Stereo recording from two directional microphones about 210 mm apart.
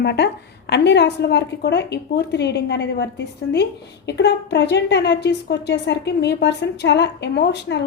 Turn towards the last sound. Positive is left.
turn(degrees=55)  # may be behind; listen again after turning